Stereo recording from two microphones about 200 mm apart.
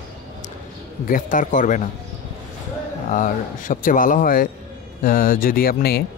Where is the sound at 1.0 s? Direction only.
40° left (ahead or behind).